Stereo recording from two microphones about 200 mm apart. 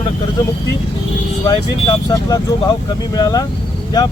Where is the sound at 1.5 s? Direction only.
20° left (ahead or behind).